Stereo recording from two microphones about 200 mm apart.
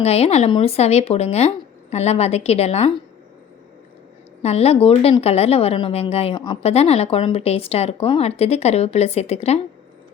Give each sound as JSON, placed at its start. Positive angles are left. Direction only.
{"t": 0.0, "sound": "a woman's voice", "side_deg": 30}
{"t": 4.4, "sound": "a woman's voice", "side_deg": 30}